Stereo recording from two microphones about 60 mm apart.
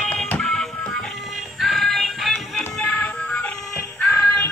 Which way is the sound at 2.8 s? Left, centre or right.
Left.